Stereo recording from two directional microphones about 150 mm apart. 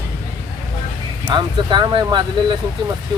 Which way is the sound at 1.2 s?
30° right (ahead or behind).